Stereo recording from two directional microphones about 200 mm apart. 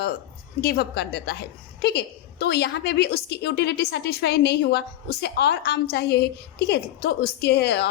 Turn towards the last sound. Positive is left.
turn(degrees=55)  # may be behind; listen again after turning